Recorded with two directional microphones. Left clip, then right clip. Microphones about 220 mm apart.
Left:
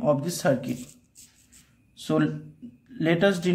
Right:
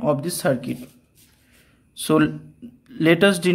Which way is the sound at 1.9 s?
25° right (ahead or behind).